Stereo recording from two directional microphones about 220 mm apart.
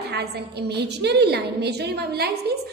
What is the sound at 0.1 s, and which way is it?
A woman's voice, 50° right (ahead or behind).